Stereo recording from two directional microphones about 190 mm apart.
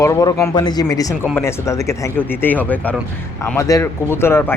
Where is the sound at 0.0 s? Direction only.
20° left (ahead or behind).